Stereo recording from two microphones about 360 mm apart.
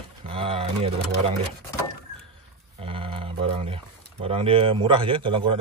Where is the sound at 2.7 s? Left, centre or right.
Centre.